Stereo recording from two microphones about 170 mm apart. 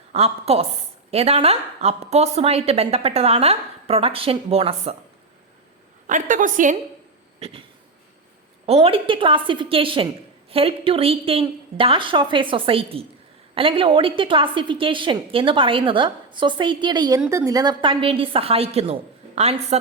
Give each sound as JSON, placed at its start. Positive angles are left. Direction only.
{"t": 0.1, "sound": "a woman's voice", "side_deg": -35}
{"t": 6.1, "sound": "a woman's voice", "side_deg": -50}
{"t": 7.3, "sound": "a sound", "side_deg": -35}
{"t": 8.6, "sound": "a woman's voice", "side_deg": -35}